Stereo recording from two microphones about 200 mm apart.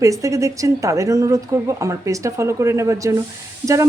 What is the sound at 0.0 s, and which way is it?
Speech, 15° right (ahead or behind).